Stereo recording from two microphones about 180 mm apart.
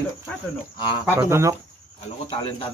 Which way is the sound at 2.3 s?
30° left (ahead or behind).